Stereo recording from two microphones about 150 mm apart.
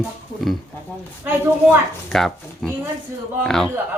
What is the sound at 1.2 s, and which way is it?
Speech, 15° right (ahead or behind).